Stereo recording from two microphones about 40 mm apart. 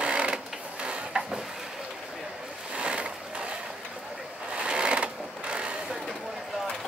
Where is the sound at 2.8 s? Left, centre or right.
Right.